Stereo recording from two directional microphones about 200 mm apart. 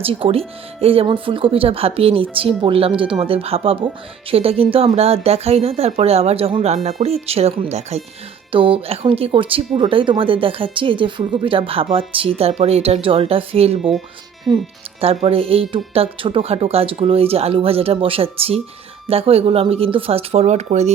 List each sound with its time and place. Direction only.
0.0 s speech: 30° right (ahead or behind)
15.0 s speech: 30° right (ahead or behind)